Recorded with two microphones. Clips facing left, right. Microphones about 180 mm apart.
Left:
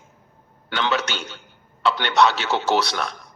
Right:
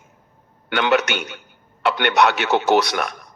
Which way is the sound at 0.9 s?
65° right (ahead or behind).